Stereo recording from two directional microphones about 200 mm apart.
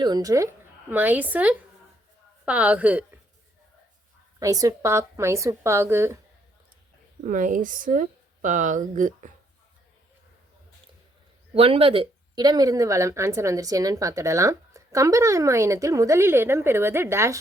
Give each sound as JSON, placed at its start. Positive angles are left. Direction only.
{"t": 0.0, "sound": "a woman's voice", "side_deg": -20}
{"t": 4.4, "sound": "speech", "side_deg": -15}
{"t": 7.3, "sound": "speech", "side_deg": -40}
{"t": 11.5, "sound": "speech", "side_deg": -30}